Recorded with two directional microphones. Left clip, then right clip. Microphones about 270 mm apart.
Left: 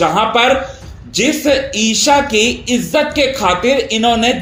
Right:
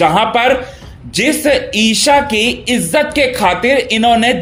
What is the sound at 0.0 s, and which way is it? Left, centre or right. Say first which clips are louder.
Speech: right 1 dB; right.